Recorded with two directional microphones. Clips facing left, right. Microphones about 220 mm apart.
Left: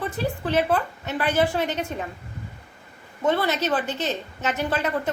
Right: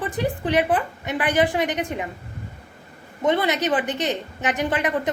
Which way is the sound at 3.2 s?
20° right (ahead or behind).